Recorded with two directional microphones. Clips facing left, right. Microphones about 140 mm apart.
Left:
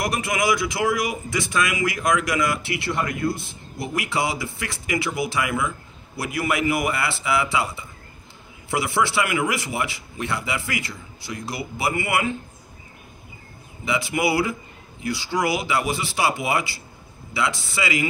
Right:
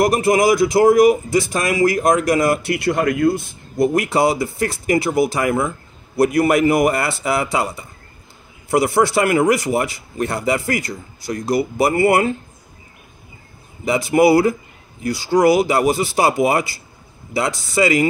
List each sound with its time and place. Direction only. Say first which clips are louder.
0.0 s a man's voice: right 9 dB; 40° right (ahead or behind); by 3.4 s 60° right (ahead or behind)
3.7 s a man's voice: right 10 dB; 40° right (ahead or behind)
13.8 s a man's voice: right 9 dB; 40° right (ahead or behind)